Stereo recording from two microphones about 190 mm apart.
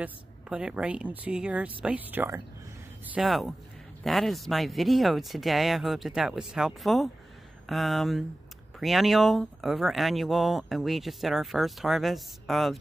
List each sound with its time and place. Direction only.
0.0 s speech: 5° right (ahead or behind)
3.2 s speech: centre (ahead or behind)